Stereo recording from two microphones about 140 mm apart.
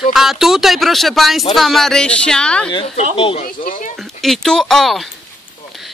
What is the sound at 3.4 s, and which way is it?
Speech, 70° left (ahead or behind).